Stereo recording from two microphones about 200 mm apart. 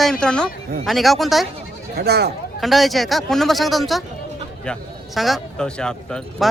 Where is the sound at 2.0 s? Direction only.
55° right (ahead or behind).